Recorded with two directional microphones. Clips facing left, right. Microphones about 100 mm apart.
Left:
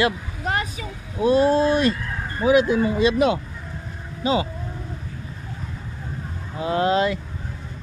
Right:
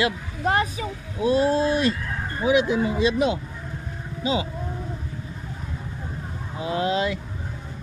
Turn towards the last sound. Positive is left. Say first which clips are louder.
# left 4 dB
turn(degrees=45)  # may be behind; listen again after turning